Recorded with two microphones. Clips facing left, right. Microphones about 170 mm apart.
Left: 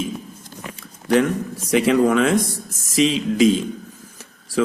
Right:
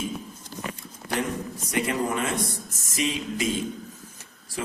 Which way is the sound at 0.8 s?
90° left.